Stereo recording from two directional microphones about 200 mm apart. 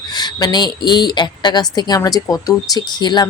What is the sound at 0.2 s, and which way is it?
A woman's voice, 20° left (ahead or behind).